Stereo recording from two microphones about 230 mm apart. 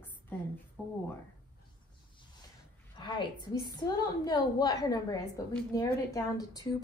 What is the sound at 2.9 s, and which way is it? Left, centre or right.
A woman's voice, centre.